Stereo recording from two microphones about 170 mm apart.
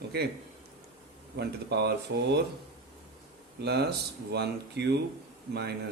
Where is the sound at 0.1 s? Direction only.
70° right (ahead or behind).